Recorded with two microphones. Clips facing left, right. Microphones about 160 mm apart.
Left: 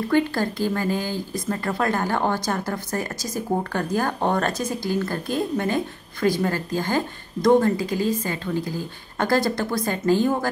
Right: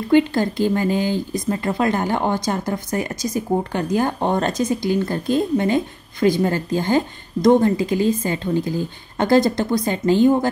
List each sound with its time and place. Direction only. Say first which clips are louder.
0.1 s speech: right 7 dB; 20° right (ahead or behind)